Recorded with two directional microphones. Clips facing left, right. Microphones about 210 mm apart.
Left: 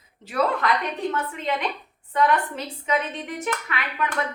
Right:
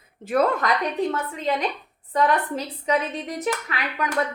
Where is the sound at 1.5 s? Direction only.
40° right (ahead or behind).